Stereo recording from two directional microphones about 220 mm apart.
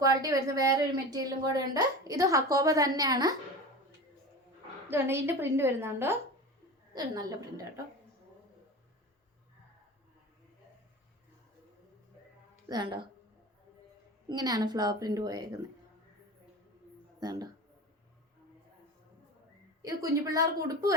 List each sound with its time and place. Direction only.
0.0 s speech: 15° right (ahead or behind)
4.9 s speech: 10° right (ahead or behind)
12.6 s speech: 20° right (ahead or behind)
14.3 s speech: 15° right (ahead or behind)
17.2 s speech: 20° right (ahead or behind)
19.8 s speech: 15° right (ahead or behind)